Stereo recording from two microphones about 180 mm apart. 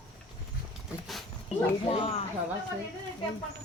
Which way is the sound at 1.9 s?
35° left (ahead or behind).